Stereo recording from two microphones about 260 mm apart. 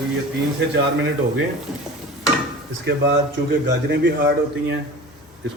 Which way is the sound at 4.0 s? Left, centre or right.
Right.